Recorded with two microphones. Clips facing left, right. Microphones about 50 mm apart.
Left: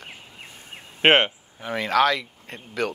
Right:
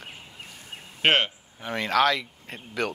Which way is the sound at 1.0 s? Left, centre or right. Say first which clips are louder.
Left 4 dB; left.